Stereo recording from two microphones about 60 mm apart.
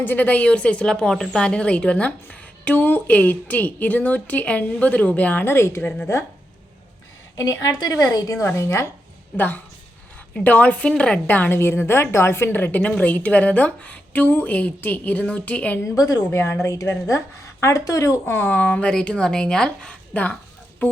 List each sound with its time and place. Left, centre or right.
0.0 s a woman's voice: left
7.3 s a woman's voice: left
8.4 s speech: left
10.4 s a woman's voice: left
11.3 s a woman's voice: left
11.5 s a woman's voice: left
15.8 s a woman's voice: left
16.3 s speech: left
18.3 s a woman's voice: left